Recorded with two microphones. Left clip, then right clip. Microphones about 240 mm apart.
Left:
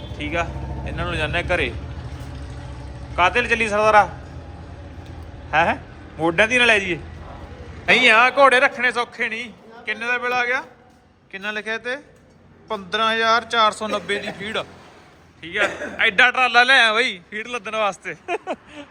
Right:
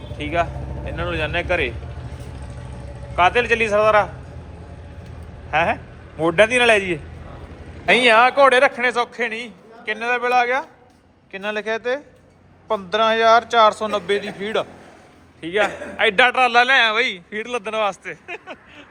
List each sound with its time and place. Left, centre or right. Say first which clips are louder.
0.2 s speech: right 3 dB; centre
3.2 s a man's voice: right 2 dB; centre
5.5 s a man's voice: left 1 dB; centre
18.3 s speech: left 7 dB; left